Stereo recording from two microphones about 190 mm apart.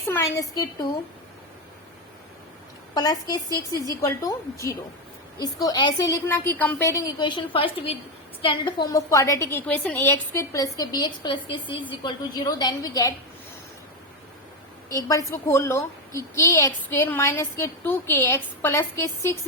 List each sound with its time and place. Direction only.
0.1 s a woman's voice: 15° left (ahead or behind)
2.9 s a woman's voice: 20° left (ahead or behind)
14.8 s a woman's voice: 20° left (ahead or behind)